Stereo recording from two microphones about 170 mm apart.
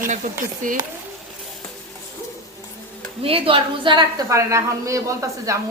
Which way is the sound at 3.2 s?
35° right (ahead or behind).